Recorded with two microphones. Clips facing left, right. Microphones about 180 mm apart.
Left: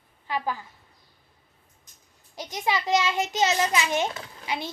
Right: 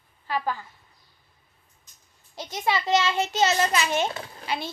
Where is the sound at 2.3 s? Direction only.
15° left (ahead or behind).